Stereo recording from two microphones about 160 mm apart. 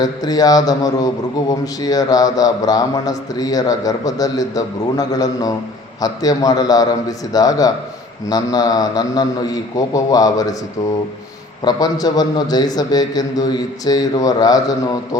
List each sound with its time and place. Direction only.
0.0 s speech: 25° left (ahead or behind)
11.6 s speech: 25° left (ahead or behind)